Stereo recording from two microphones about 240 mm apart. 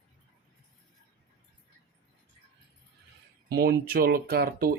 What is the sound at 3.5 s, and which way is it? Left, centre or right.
Speech, right.